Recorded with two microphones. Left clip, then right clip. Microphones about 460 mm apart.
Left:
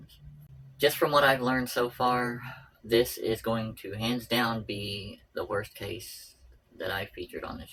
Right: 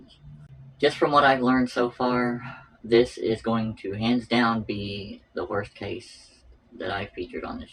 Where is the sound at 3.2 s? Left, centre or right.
Left.